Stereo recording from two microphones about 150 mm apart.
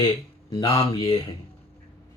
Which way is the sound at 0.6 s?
40° left (ahead or behind).